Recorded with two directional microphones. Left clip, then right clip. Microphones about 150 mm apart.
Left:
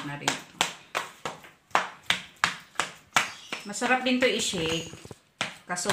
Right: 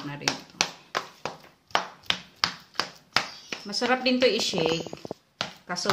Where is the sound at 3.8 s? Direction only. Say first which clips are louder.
Right 1 dB; 35° right (ahead or behind).